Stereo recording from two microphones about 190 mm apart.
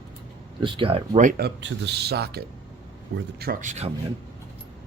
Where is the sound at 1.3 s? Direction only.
60° right (ahead or behind).